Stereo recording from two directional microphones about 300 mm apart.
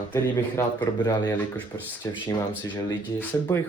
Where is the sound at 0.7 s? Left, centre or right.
Centre.